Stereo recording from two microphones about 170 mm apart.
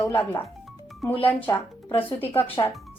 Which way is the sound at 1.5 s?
20° left (ahead or behind).